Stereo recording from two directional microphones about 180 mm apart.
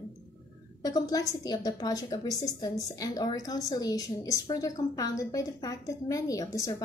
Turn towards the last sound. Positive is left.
turn(degrees=20)  # may be behind; listen again after turning